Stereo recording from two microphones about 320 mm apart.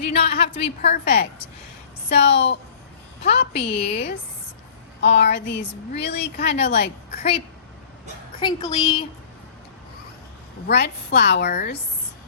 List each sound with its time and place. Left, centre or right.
0.0 s a woman's voice: left
8.4 s a woman's voice: centre
10.7 s a woman's voice: left